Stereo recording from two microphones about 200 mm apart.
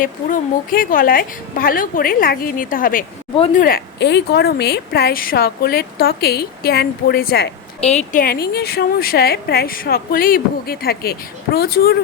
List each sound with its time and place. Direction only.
0.0 s a woman's voice: 45° left (ahead or behind)
3.3 s speech: 30° left (ahead or behind)
3.6 s a woman's voice: 45° left (ahead or behind)
7.8 s a woman's voice: 35° left (ahead or behind); by 11.9 s 50° left (ahead or behind)